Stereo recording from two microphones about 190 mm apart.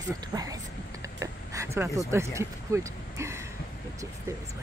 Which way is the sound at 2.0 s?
15° right (ahead or behind).